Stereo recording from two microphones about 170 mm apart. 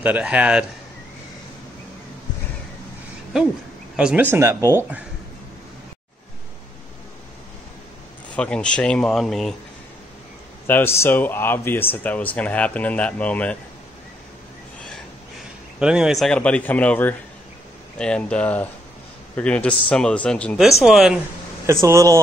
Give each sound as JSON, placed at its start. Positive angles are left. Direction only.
{"t": 0.0, "sound": "speech", "side_deg": -10}
{"t": 3.9, "sound": "speech", "side_deg": -5}
{"t": 8.4, "sound": "speech", "side_deg": 5}
{"t": 10.7, "sound": "speech", "side_deg": 15}
{"t": 15.8, "sound": "speech", "side_deg": -5}
{"t": 21.6, "sound": "speech", "side_deg": -15}